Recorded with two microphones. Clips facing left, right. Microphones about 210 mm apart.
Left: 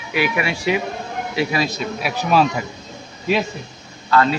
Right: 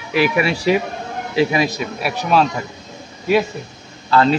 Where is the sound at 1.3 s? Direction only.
30° right (ahead or behind).